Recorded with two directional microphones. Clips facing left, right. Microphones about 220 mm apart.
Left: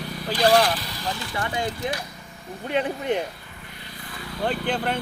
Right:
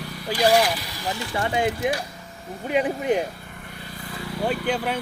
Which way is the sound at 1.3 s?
20° right (ahead or behind).